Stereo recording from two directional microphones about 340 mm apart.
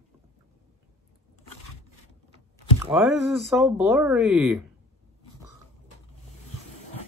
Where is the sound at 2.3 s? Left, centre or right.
Centre.